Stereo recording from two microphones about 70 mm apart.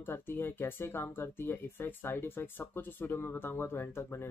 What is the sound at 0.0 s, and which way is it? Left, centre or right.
Speech, left.